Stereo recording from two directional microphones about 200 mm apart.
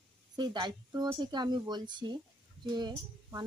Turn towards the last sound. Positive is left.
turn(degrees=-20)  # may be behind; listen again after turning